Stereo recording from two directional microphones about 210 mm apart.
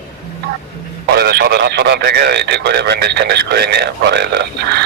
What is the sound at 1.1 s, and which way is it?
A man's voice, 50° right (ahead or behind).